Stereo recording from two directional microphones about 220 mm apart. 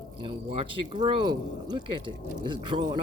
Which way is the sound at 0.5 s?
20° right (ahead or behind).